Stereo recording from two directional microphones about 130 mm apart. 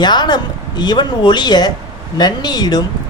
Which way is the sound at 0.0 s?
35° left (ahead or behind).